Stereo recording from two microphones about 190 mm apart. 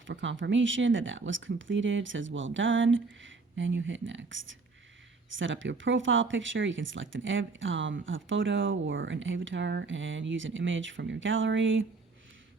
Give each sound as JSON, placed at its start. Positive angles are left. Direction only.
{"t": 0.0, "sound": "speech", "side_deg": -75}